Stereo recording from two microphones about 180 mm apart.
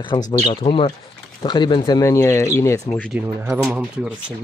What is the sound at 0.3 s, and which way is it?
Speech, 30° left (ahead or behind).